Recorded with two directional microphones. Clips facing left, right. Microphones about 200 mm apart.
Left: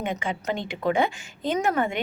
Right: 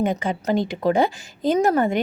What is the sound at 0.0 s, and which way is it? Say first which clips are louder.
A woman's voice: right 6 dB; 40° right (ahead or behind).